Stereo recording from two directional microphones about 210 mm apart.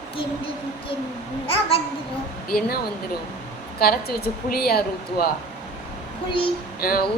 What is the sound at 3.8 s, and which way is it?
A woman's voice, 45° left (ahead or behind).